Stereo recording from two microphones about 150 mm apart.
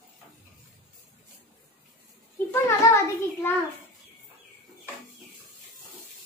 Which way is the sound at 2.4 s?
15° left (ahead or behind).